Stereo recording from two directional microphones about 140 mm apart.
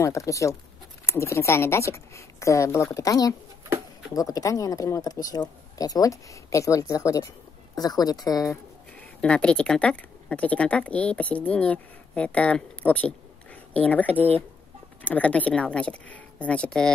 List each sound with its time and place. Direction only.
0.0 s speech: 20° left (ahead or behind)
8.9 s speech: 10° left (ahead or behind)